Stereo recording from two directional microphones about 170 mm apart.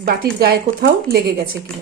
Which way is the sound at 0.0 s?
65° right (ahead or behind).